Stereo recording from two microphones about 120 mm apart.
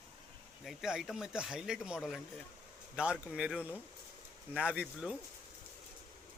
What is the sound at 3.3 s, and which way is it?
Speech, 10° right (ahead or behind).